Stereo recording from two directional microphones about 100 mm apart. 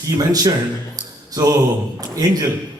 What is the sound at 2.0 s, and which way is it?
Speech, 40° right (ahead or behind).